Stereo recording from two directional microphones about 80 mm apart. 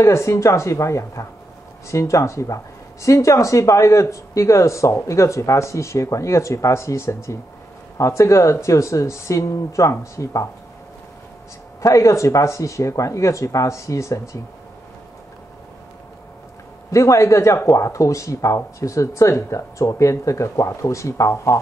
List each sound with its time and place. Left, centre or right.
0.0 s speech: left
11.8 s speech: left
16.9 s speech: left